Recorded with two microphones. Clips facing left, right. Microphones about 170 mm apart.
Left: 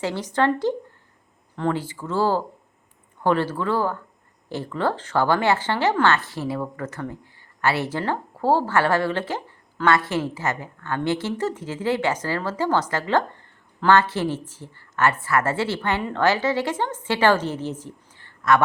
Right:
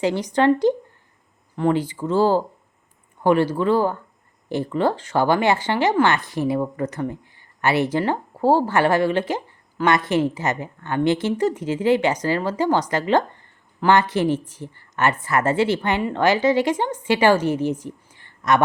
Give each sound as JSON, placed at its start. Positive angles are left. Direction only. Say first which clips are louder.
{"t": 0.0, "sound": "speech", "louder": "right 4 dB", "side_deg": -15}